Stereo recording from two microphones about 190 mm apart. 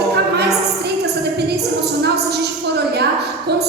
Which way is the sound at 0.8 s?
60° right (ahead or behind).